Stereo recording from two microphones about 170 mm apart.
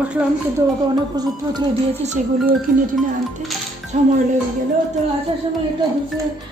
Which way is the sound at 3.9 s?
45° right (ahead or behind).